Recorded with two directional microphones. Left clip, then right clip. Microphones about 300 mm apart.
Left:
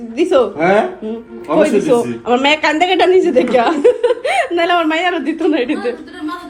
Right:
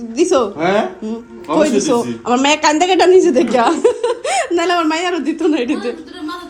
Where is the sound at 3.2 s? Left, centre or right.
Right.